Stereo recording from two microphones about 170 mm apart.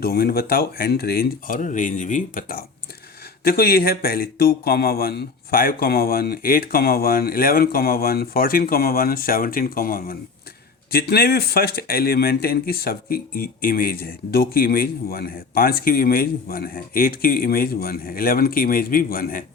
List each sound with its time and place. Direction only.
0.0 s speech: 65° left (ahead or behind)